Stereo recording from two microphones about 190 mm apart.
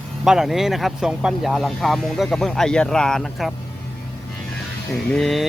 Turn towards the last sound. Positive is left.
turn(degrees=0)  # may be behind; listen again after turning